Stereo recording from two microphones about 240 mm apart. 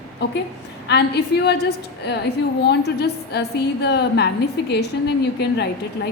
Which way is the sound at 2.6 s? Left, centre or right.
Left.